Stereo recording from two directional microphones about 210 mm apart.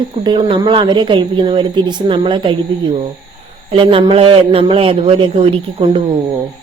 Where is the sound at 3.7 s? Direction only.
25° right (ahead or behind).